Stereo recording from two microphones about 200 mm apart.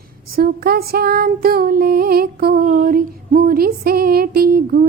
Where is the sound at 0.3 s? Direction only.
50° right (ahead or behind).